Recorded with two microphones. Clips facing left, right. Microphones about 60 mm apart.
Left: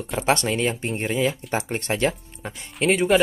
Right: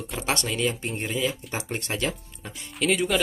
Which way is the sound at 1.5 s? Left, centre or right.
Left.